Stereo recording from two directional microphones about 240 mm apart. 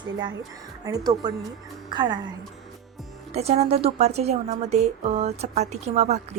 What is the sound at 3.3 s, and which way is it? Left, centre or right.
A woman's voice, right.